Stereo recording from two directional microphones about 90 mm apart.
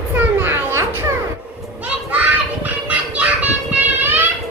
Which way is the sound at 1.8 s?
15° right (ahead or behind).